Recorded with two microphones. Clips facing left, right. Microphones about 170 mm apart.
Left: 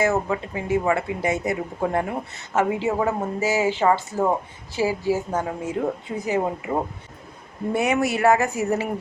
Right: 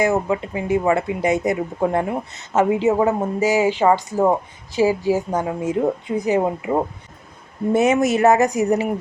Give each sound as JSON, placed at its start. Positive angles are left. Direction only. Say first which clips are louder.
{"t": 0.0, "sound": "a woman's voice", "louder": "right 3 dB", "side_deg": -20}
{"t": 7.7, "sound": "speech", "louder": "right 5 dB", "side_deg": -20}